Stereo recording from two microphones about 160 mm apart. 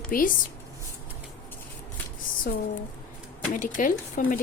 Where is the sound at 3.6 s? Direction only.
55° left (ahead or behind).